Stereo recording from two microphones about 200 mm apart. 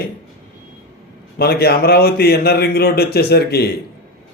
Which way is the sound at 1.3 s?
50° left (ahead or behind).